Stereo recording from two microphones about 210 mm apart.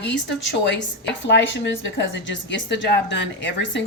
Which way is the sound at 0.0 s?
55° left (ahead or behind).